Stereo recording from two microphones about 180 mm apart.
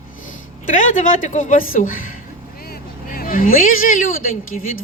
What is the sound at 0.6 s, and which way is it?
Speech, 45° left (ahead or behind).